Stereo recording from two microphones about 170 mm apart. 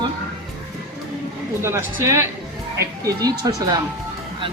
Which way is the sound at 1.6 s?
15° right (ahead or behind).